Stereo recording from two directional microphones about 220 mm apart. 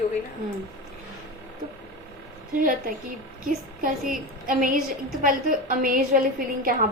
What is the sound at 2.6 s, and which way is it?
A woman's voice, 40° right (ahead or behind).